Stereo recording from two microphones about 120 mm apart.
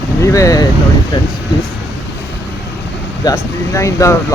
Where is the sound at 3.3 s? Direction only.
25° left (ahead or behind).